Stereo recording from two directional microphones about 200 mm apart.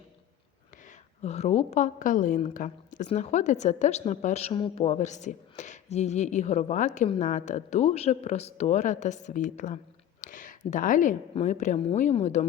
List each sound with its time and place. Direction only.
1.2 s a woman's voice: 35° left (ahead or behind)